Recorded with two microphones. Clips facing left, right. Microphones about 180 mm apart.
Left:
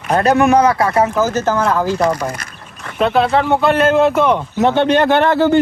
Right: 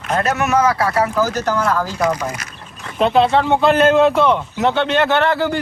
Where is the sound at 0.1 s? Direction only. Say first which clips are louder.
Left 6 dB; 35° left (ahead or behind).